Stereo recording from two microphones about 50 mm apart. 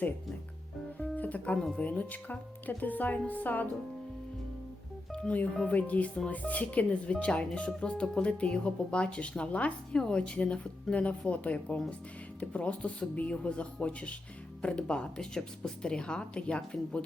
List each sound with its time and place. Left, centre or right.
0.9 s music: left
1.5 s speech: centre
1.8 s speech: left
5.6 s a woman's voice: left
9.9 s a woman's voice: centre